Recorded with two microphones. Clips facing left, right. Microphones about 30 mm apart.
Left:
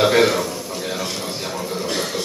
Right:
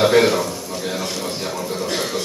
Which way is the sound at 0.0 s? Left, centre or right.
Centre.